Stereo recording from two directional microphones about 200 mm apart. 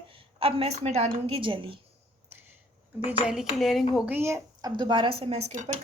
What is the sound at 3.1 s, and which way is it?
Speech, 5° right (ahead or behind).